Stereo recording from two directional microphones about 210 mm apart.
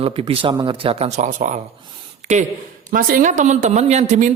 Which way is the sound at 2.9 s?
40° right (ahead or behind).